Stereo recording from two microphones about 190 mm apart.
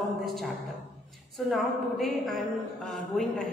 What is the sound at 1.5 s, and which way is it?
A woman's voice, centre (ahead or behind).